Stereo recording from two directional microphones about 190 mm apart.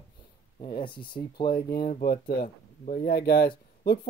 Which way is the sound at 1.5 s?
55° left (ahead or behind).